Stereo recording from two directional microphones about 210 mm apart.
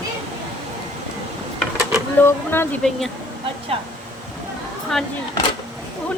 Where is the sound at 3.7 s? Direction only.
25° right (ahead or behind).